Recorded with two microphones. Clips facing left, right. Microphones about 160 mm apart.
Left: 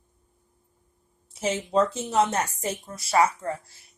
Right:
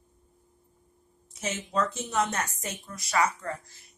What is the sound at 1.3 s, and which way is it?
A woman's voice, 30° left (ahead or behind).